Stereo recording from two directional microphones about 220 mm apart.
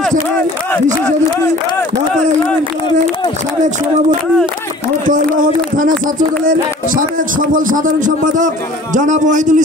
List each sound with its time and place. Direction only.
5.0 s speech: 35° right (ahead or behind)